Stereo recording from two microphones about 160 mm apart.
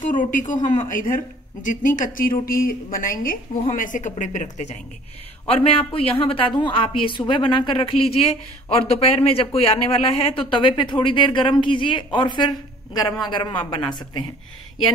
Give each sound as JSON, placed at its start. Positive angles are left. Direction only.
{"t": 0.0, "sound": "a woman's voice", "side_deg": 55}
{"t": 5.5, "sound": "a woman's voice", "side_deg": 35}